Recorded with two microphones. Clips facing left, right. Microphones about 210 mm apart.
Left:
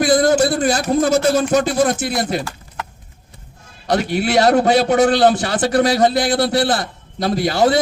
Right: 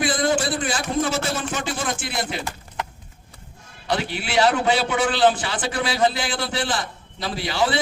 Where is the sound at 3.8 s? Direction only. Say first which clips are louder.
Left 8 dB; 40° left (ahead or behind).